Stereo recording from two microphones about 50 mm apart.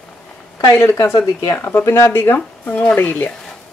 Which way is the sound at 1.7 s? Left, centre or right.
Left.